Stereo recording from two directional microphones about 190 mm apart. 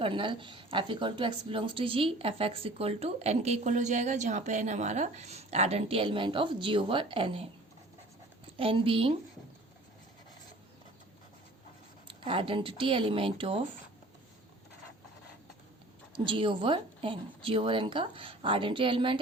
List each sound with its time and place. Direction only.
0.0 s a woman's voice: 25° right (ahead or behind)
8.5 s a woman's voice: 30° right (ahead or behind)
12.0 s a woman's voice: 25° right (ahead or behind)
16.1 s a woman's voice: 25° right (ahead or behind)